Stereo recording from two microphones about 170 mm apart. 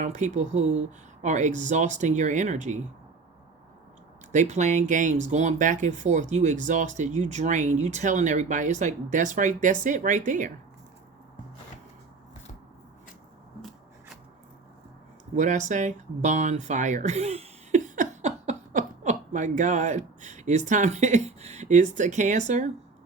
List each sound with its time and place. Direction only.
0.0 s speech: 45° right (ahead or behind)
4.3 s speech: 45° right (ahead or behind)
13.6 s rub: centre (ahead or behind)
15.4 s speech: 45° right (ahead or behind)